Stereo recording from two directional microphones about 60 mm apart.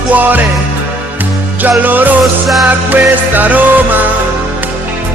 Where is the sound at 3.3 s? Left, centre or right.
Right.